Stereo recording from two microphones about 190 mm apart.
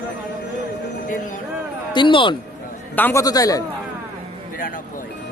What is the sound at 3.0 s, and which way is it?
Speech, 10° left (ahead or behind).